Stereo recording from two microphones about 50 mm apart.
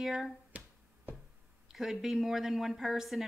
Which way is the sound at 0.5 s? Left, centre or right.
Right.